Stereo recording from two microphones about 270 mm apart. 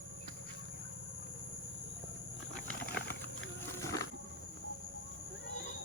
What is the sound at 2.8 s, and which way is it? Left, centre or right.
Horse, left.